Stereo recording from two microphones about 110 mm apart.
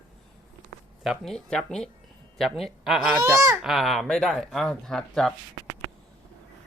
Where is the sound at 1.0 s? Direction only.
5° left (ahead or behind).